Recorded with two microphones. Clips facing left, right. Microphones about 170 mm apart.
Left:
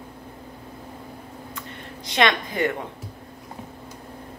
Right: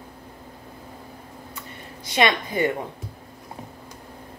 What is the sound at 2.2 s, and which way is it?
Speech, 10° right (ahead or behind).